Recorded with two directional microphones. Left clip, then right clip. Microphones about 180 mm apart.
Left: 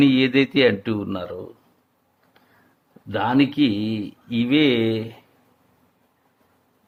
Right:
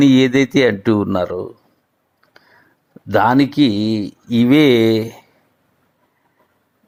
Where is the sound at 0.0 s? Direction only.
35° right (ahead or behind).